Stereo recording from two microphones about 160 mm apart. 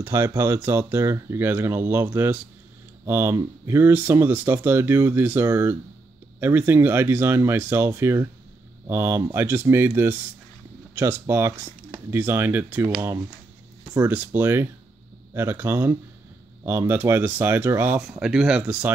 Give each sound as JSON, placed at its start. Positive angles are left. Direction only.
{"t": 0.0, "sound": "speech", "side_deg": -15}